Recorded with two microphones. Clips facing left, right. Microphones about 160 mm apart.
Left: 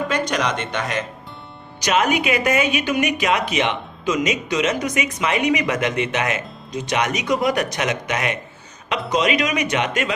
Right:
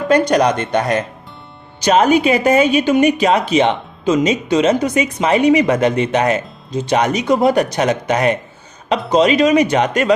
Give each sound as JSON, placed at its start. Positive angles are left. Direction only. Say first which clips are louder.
{"t": 0.1, "sound": "a woman's voice", "louder": "right 9 dB", "side_deg": -40}